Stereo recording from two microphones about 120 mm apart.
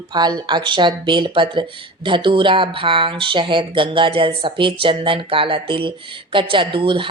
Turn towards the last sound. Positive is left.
turn(degrees=-45)  # may be behind; listen again after turning